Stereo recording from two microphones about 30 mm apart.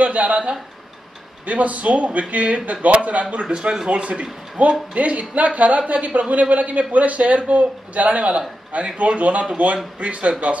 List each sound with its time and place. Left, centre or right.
0.0 s speech: right
1.4 s speech: right
3.3 s speech: right
4.6 s speech: right